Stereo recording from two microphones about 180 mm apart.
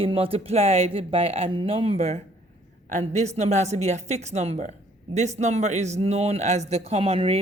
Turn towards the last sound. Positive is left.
turn(degrees=-30)  # may be behind; listen again after turning